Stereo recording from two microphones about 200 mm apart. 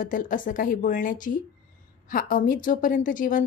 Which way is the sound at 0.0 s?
40° left (ahead or behind).